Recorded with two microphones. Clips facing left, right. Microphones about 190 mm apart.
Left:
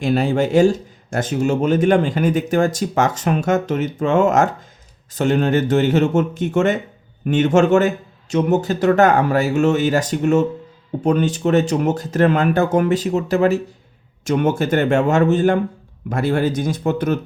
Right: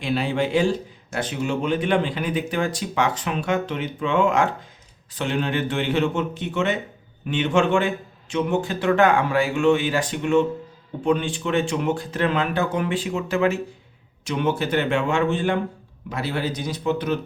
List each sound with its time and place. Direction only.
0.0 s a man's voice: 45° left (ahead or behind)